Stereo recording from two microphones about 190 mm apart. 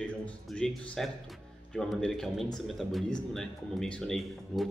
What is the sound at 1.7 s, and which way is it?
Speech, 5° left (ahead or behind).